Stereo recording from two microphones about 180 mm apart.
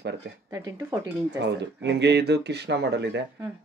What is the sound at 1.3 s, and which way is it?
Speech, 70° right (ahead or behind).